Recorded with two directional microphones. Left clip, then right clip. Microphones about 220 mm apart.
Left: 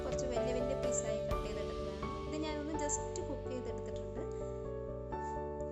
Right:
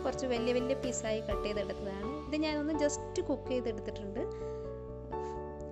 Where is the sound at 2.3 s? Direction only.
25° right (ahead or behind).